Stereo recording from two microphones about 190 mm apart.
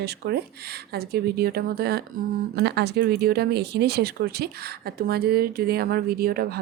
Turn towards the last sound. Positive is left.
turn(degrees=-55)  # may be behind; listen again after turning